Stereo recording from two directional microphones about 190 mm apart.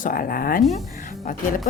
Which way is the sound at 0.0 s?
50° left (ahead or behind).